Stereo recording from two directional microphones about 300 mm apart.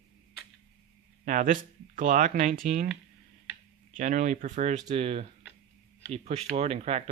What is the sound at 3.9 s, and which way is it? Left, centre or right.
Speech, right.